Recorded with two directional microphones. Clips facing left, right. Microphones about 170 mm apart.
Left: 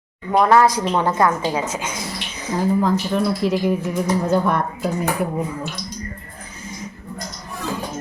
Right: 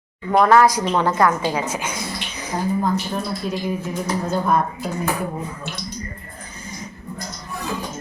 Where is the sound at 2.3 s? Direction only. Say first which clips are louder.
Left 2 dB; 25° left (ahead or behind).